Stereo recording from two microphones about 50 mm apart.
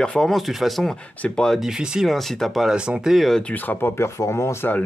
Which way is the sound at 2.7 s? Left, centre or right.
Centre.